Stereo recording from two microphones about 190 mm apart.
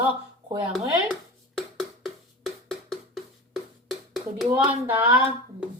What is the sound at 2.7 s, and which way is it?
Percussion, centre (ahead or behind).